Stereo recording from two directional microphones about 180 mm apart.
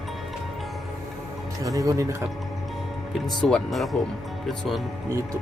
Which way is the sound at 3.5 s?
Centre (ahead or behind).